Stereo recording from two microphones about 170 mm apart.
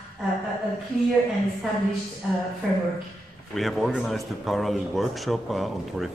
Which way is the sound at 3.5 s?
Centre (ahead or behind).